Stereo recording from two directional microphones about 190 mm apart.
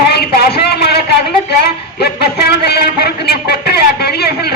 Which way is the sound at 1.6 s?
60° left (ahead or behind).